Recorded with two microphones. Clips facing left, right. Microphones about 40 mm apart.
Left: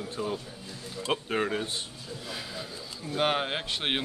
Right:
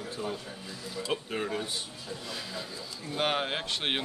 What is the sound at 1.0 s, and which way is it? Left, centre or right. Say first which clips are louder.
Speech: left 4 dB; left.